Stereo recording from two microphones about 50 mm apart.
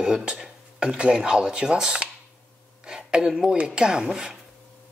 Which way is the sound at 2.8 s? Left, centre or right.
Centre.